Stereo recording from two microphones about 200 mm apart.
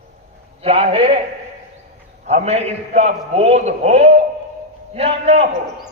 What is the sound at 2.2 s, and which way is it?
A man's voice, 35° right (ahead or behind).